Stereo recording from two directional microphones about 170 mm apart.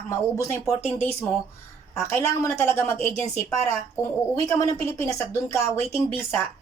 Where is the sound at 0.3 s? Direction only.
20° left (ahead or behind).